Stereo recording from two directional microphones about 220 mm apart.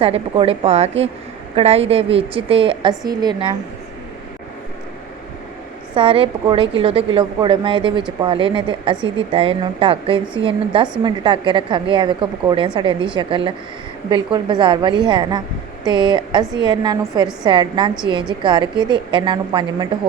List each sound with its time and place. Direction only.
0.0 s a woman's voice: 25° right (ahead or behind)
5.9 s a woman's voice: 25° right (ahead or behind)